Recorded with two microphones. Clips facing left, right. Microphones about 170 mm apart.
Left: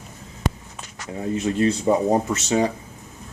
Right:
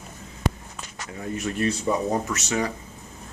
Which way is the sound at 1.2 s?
25° left (ahead or behind).